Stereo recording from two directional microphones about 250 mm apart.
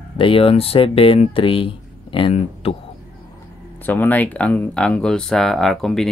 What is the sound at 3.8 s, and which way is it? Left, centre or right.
Speech, centre.